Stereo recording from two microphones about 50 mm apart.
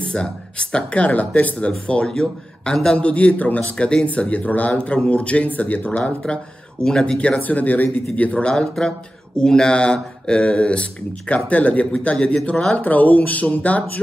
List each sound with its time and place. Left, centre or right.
0.0 s speech: centre
5.9 s speech: left
12.7 s speech: left